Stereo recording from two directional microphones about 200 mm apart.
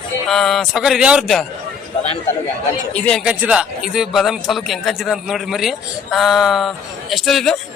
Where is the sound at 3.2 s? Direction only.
5° right (ahead or behind).